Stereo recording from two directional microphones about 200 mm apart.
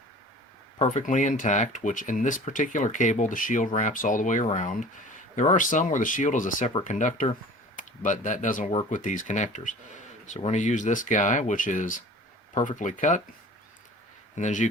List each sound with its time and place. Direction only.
0.8 s speech: 40° left (ahead or behind)
14.3 s speech: 35° left (ahead or behind)